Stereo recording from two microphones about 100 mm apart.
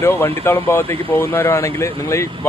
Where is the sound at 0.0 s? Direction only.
25° left (ahead or behind).